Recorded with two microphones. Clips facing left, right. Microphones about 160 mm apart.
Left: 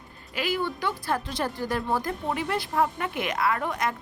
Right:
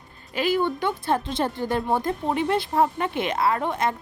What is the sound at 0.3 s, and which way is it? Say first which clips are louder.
A woman's voice: right 5 dB; 25° right (ahead or behind).